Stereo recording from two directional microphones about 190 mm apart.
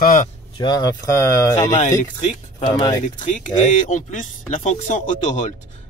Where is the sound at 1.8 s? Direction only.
40° left (ahead or behind).